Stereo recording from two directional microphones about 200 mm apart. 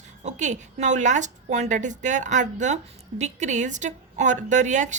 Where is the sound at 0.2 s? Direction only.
35° right (ahead or behind).